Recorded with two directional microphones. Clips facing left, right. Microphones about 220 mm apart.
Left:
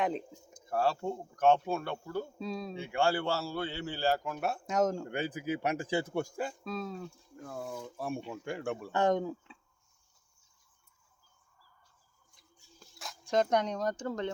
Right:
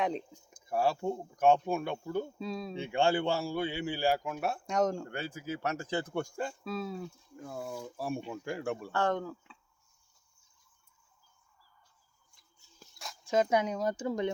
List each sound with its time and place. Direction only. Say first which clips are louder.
0.0 s speech: even; centre (ahead or behind)
0.6 s a man's voice: right 1 dB; 10° right (ahead or behind)
2.4 s speech: even; centre (ahead or behind)
2.7 s a man's voice: right 2 dB; 20° right (ahead or behind); by 5.0 s centre (ahead or behind)
5.0 s speech: left 4 dB; 15° left (ahead or behind); by 8.9 s centre (ahead or behind)
8.9 s speech: left 4 dB; 15° left (ahead or behind)
12.3 s a sound: left 7 dB; 15° left (ahead or behind)
13.0 s speech: right 1 dB; centre (ahead or behind)